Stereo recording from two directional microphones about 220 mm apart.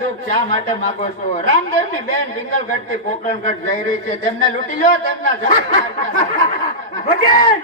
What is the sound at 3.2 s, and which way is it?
Speech, 35° left (ahead or behind).